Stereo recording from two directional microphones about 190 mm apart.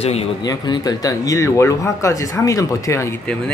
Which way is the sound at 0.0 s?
35° left (ahead or behind).